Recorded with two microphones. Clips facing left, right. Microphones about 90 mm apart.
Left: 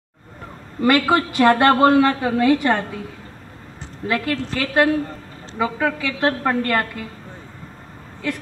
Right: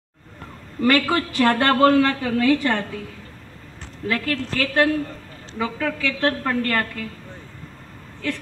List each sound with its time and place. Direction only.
0.7 s a woman's voice: 20° left (ahead or behind)
4.1 s a woman's voice: 25° left (ahead or behind)